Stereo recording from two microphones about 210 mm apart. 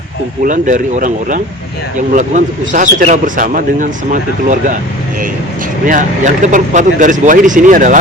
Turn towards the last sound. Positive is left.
turn(degrees=-40)  # may be behind; listen again after turning